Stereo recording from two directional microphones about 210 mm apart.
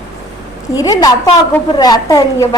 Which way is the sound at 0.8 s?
15° left (ahead or behind).